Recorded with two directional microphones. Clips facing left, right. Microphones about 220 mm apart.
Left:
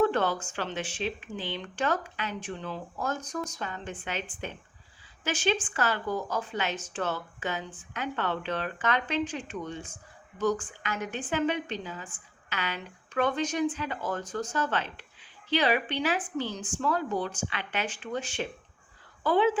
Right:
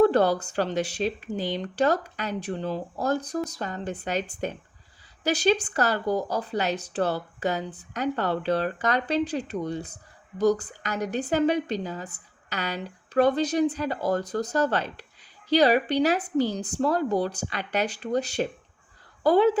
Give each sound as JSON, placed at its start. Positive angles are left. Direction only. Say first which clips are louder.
{"t": 0.0, "sound": "speech", "louder": "right 6 dB", "side_deg": -35}